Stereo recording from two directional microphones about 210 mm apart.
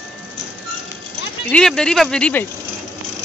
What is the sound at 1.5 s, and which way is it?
Speech, 5° left (ahead or behind).